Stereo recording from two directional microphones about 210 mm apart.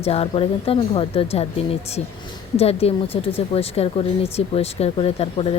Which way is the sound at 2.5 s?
30° left (ahead or behind).